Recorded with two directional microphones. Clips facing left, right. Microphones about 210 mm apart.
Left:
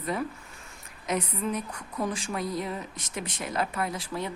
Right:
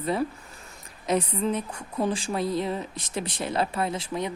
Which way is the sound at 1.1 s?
30° right (ahead or behind).